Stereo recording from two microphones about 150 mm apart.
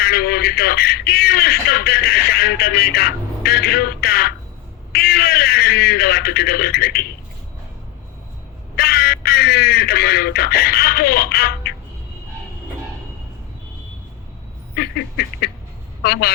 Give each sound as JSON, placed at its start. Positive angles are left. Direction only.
{"t": 0.0, "sound": "speech", "side_deg": 90}
{"t": 8.7, "sound": "speech", "side_deg": 90}
{"t": 14.8, "sound": "a sound", "side_deg": 90}